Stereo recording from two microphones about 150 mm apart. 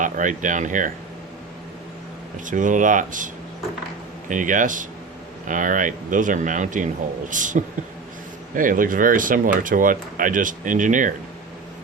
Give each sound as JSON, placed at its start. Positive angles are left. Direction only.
{"t": 0.0, "sound": "speech", "side_deg": -60}
{"t": 2.5, "sound": "speech", "side_deg": -60}
{"t": 4.3, "sound": "speech", "side_deg": -60}